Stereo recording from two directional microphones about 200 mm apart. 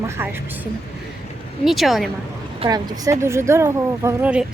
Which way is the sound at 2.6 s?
20° right (ahead or behind).